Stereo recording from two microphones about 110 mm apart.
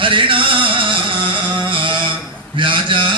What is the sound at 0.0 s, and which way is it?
Singing, 50° right (ahead or behind).